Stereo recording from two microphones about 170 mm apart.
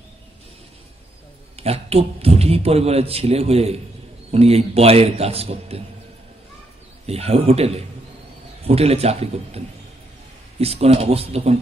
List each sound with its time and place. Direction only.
1.6 s a man's voice: 35° right (ahead or behind)
7.1 s a man's voice: 35° right (ahead or behind)
10.6 s a man's voice: 35° right (ahead or behind)